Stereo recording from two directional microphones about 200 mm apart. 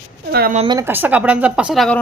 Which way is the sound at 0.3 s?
50° right (ahead or behind).